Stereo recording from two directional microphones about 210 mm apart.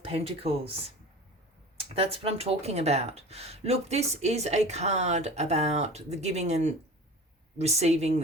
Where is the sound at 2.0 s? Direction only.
30° right (ahead or behind).